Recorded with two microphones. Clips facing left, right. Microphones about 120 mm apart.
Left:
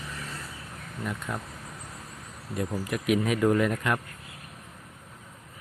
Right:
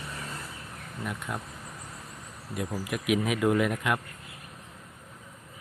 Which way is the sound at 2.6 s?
5° right (ahead or behind).